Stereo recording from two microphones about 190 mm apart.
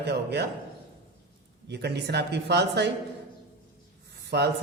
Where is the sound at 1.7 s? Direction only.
60° right (ahead or behind).